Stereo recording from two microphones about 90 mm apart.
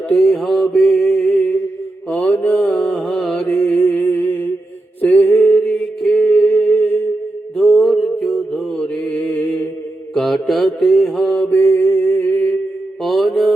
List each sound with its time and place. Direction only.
0.1 s mantra: 10° left (ahead or behind)
2.0 s mantra: 15° left (ahead or behind)
5.0 s a sound: 15° left (ahead or behind)
5.5 s a sound: 5° left (ahead or behind); by 7.0 s 20° left (ahead or behind)
7.8 s mantra: centre (ahead or behind)
9.0 s mantra: 15° left (ahead or behind)
10.2 s mantra: centre (ahead or behind); by 12.5 s 20° left (ahead or behind)
13.0 s mantra: centre (ahead or behind)